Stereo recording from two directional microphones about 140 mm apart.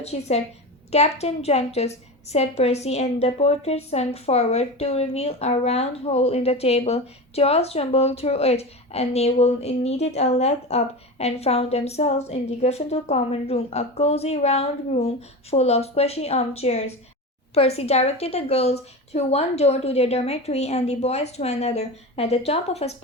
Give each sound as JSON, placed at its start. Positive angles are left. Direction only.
{"t": 0.0, "sound": "a woman's voice", "side_deg": 50}